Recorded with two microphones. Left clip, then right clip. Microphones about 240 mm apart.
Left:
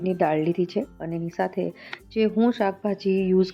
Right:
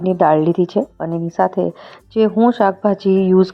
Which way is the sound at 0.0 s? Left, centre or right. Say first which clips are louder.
Right 9 dB; centre.